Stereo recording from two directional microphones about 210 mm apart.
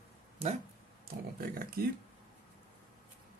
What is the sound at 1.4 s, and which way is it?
Speech, 45° right (ahead or behind).